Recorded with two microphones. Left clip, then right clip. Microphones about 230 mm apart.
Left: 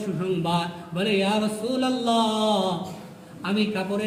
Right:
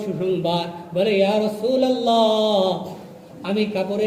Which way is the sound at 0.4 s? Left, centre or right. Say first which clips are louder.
Right 3 dB; centre.